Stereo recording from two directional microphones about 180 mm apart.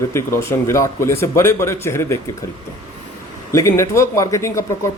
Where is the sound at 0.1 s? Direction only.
15° left (ahead or behind).